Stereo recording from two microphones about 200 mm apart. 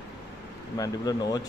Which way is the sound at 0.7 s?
20° left (ahead or behind).